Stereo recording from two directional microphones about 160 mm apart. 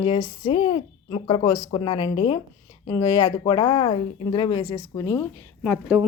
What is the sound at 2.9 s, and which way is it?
A woman's voice, 20° left (ahead or behind).